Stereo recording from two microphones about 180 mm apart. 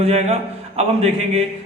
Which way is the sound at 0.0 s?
35° right (ahead or behind).